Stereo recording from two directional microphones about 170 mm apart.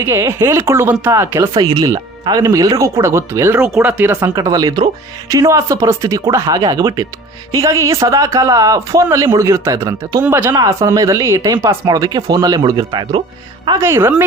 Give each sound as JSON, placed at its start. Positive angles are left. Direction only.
{"t": 0.0, "sound": "speech", "side_deg": -15}
{"t": 13.7, "sound": "speech", "side_deg": -15}